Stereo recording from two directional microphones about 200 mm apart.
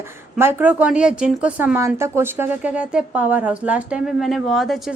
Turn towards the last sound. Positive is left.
turn(degrees=0)  # may be behind; listen again after turning